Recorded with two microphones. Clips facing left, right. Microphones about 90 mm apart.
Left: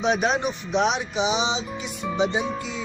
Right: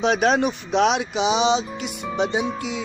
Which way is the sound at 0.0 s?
70° right (ahead or behind).